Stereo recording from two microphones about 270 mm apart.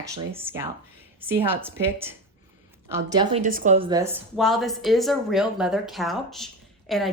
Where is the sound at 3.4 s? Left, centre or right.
Right; by 4.2 s centre.